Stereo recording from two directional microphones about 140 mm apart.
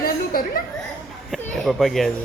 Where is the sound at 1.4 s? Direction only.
Centre (ahead or behind).